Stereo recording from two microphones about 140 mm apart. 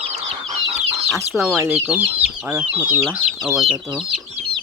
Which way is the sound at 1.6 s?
15° right (ahead or behind).